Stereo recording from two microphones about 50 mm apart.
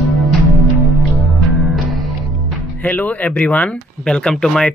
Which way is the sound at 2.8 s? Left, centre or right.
Left.